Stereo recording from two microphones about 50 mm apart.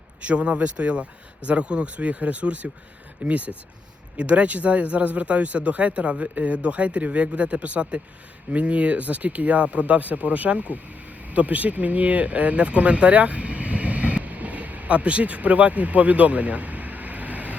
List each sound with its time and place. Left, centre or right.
0.2 s speech: right